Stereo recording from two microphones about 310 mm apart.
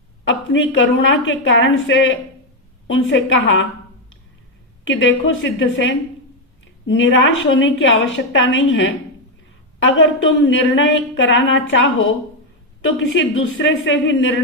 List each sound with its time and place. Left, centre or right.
0.3 s a woman's voice: left
4.9 s a woman's voice: left